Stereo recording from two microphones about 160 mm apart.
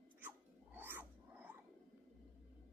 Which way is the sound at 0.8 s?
10° right (ahead or behind).